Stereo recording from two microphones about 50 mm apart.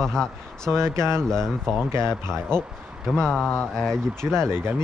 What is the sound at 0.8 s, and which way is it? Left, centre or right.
Speech, right.